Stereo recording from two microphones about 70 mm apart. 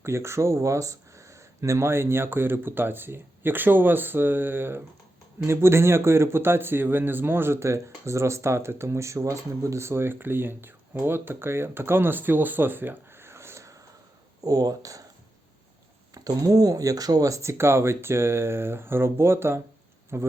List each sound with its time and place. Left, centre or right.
0.0 s speech: right
14.4 s speech: right
16.1 s speech: right